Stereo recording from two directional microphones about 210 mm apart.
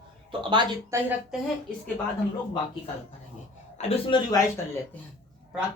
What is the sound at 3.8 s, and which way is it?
Speech, 30° left (ahead or behind).